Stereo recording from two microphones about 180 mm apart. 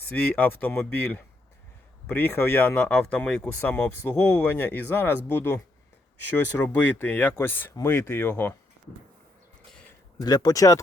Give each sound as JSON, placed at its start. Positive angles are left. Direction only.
{"t": 0.0, "sound": "speech", "side_deg": 10}
{"t": 10.2, "sound": "speech", "side_deg": 20}